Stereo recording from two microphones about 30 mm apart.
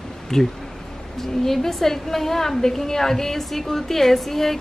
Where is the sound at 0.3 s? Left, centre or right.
Centre.